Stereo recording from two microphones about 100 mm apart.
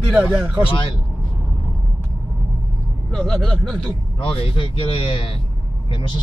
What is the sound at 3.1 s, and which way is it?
Speech, 5° left (ahead or behind).